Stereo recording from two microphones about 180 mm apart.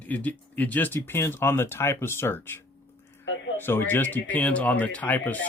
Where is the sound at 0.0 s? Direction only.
10° left (ahead or behind).